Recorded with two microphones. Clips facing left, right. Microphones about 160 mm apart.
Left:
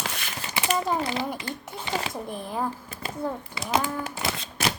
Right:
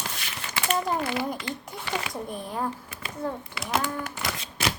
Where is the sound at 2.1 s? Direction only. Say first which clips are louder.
Left 1 dB; 5° left (ahead or behind).